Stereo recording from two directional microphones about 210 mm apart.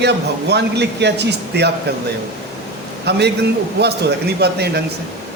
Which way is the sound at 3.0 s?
55° right (ahead or behind).